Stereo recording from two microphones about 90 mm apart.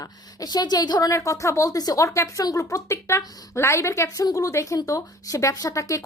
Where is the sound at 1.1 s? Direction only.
35° left (ahead or behind).